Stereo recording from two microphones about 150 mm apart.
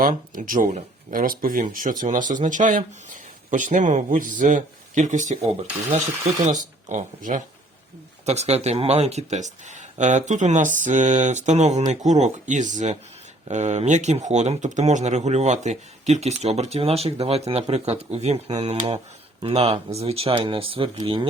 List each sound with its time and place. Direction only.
0.0 s speech: 65° right (ahead or behind)
6.8 s speech: 55° right (ahead or behind); by 21.2 s 35° right (ahead or behind)